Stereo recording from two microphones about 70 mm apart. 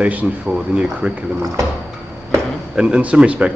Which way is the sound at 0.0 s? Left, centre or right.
Centre.